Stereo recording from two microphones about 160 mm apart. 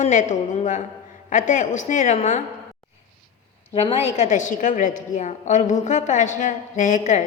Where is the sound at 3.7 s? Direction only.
40° left (ahead or behind).